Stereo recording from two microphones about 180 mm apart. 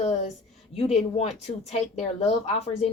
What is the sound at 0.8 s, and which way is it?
Speech, 35° left (ahead or behind).